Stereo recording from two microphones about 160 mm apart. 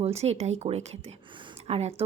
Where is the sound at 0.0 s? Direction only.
40° right (ahead or behind).